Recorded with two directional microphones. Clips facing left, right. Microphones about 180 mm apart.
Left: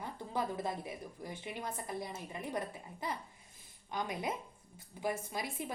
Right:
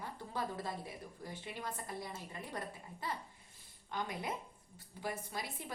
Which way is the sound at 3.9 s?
20° left (ahead or behind).